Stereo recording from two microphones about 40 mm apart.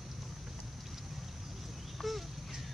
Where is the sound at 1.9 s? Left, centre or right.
Centre.